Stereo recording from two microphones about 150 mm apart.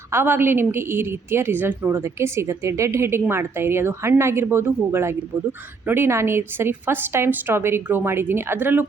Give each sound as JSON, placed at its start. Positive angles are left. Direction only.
{"t": 0.1, "sound": "a woman's voice", "side_deg": -15}